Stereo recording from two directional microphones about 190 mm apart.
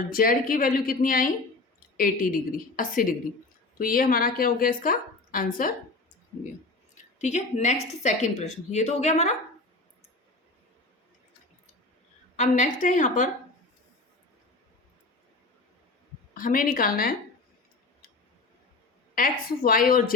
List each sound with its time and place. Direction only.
0.1 s a woman's voice: 50° left (ahead or behind)
6.9 s a woman's voice: 40° left (ahead or behind)
12.4 s a woman's voice: 40° left (ahead or behind)
16.3 s a woman's voice: 45° left (ahead or behind)
19.1 s a woman's voice: 45° left (ahead or behind)